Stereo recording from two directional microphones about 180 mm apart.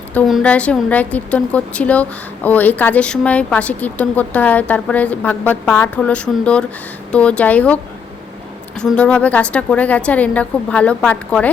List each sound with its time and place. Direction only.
0.1 s a woman's voice: 5° left (ahead or behind)
8.8 s a woman's voice: 5° left (ahead or behind)